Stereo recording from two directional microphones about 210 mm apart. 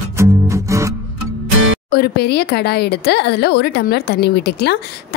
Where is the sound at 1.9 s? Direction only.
50° left (ahead or behind).